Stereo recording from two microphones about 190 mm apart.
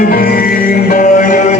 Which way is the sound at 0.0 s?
50° left (ahead or behind).